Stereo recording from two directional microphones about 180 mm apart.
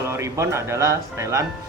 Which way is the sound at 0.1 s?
15° right (ahead or behind).